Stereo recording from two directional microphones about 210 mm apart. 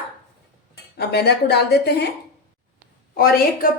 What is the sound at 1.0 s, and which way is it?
A woman's voice, 50° left (ahead or behind).